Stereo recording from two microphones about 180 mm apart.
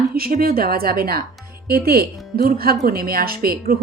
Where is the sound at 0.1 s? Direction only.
55° right (ahead or behind).